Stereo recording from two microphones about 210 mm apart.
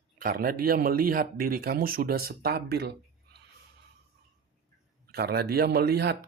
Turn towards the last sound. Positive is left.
turn(degrees=-50)  # may be behind; listen again after turning